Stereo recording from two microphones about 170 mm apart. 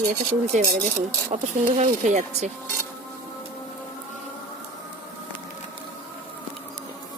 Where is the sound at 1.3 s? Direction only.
45° right (ahead or behind).